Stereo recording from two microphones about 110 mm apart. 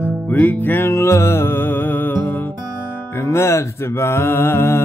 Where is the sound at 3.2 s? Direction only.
25° left (ahead or behind).